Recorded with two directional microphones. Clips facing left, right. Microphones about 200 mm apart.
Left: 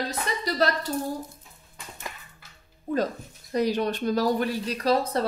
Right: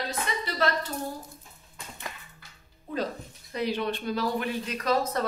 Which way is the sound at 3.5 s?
40° left (ahead or behind).